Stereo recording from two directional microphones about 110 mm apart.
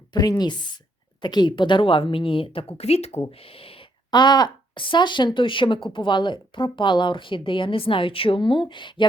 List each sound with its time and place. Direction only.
0.1 s speech: 35° left (ahead or behind); by 3.2 s 75° left (ahead or behind)
3.4 s speech: 60° left (ahead or behind)
4.1 s speech: 40° left (ahead or behind)